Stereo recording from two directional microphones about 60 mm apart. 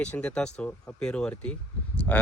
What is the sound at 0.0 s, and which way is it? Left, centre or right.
Speech, centre.